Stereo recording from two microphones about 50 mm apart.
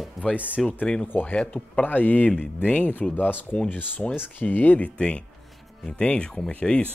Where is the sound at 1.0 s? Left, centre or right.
Left.